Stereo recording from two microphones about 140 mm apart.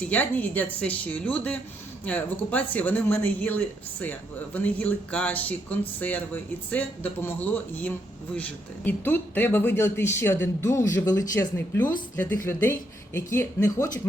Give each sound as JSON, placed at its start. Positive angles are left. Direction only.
{"t": 0.1, "sound": "speech", "side_deg": 10}